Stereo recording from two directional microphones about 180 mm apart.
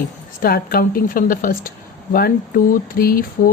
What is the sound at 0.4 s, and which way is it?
Speech, 55° left (ahead or behind).